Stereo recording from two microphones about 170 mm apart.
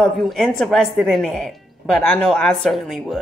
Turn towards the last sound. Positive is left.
turn(degrees=0)  # may be behind; listen again after turning